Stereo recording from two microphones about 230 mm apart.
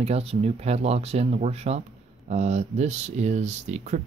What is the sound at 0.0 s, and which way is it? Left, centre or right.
Speech, right.